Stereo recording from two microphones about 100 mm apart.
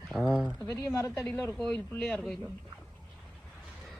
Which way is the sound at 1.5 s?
10° left (ahead or behind).